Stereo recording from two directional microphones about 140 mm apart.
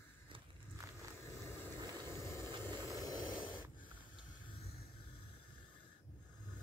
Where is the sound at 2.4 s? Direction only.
30° right (ahead or behind).